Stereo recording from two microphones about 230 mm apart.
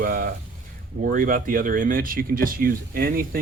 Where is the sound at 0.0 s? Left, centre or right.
Right.